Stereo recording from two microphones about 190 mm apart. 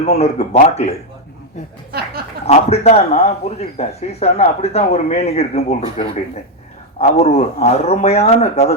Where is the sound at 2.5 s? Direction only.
35° left (ahead or behind).